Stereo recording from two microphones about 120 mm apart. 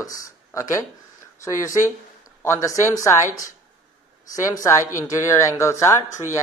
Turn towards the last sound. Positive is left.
turn(degrees=25)  # may be behind; listen again after turning